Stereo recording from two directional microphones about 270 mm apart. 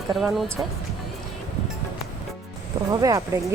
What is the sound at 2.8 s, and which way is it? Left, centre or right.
Speech, centre.